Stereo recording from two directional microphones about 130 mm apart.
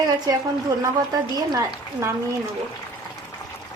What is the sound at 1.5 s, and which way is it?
Speech, 25° right (ahead or behind).